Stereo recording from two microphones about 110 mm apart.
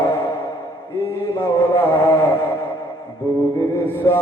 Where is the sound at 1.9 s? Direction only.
20° left (ahead or behind).